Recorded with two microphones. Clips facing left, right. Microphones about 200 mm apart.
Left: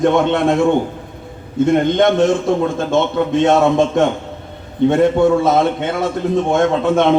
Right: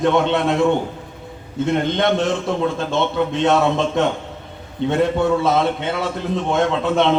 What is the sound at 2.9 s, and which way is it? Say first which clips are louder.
A man's voice: left 7 dB; 50° left (ahead or behind).